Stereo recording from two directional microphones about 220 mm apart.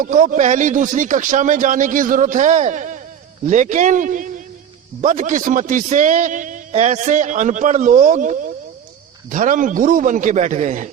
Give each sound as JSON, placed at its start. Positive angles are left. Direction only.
{"t": 0.0, "sound": "a man's voice", "side_deg": -35}